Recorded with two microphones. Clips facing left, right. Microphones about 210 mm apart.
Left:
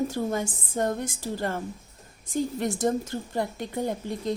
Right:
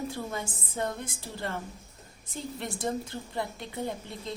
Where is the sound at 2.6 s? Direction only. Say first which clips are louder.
Left 3 dB; 45° left (ahead or behind).